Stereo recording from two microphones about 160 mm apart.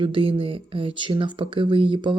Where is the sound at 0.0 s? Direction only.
35° right (ahead or behind).